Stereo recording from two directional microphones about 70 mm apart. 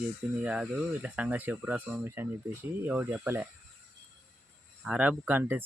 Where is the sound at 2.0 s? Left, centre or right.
Right.